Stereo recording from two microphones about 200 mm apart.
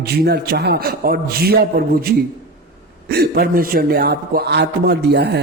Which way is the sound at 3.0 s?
50° right (ahead or behind).